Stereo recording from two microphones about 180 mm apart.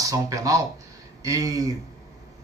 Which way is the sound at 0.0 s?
20° right (ahead or behind).